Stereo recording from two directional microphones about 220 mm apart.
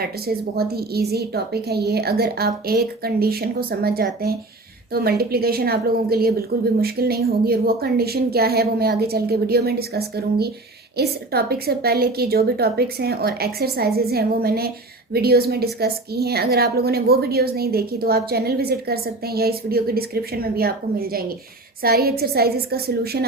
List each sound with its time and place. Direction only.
0.0 s a woman's voice: 45° right (ahead or behind)